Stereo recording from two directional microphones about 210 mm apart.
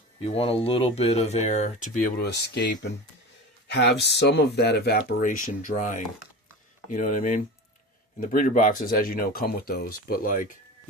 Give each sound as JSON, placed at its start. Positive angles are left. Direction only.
{"t": 0.2, "sound": "speech", "side_deg": 30}
{"t": 2.1, "sound": "speech", "side_deg": 55}